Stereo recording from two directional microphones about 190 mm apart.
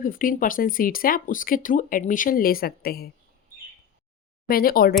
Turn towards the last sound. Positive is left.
turn(degrees=50)  # may be behind; listen again after turning